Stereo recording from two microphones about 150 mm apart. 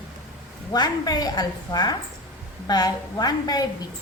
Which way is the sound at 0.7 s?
25° left (ahead or behind).